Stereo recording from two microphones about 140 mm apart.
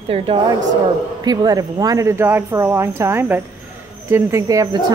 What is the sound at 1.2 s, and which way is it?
A woman's voice, 30° right (ahead or behind).